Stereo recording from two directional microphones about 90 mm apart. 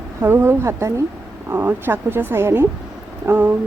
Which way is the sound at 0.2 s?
25° right (ahead or behind).